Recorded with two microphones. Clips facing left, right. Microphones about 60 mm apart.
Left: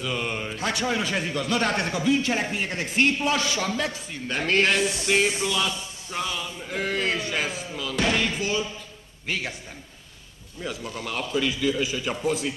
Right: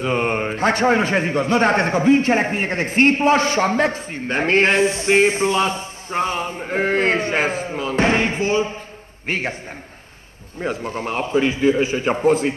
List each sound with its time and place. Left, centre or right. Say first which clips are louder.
0.0 s a man's voice: right 9 dB; right
10.6 s a man's voice: right 8 dB; right